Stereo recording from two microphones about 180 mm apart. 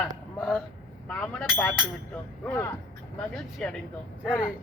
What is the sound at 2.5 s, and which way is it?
Speech, 15° left (ahead or behind).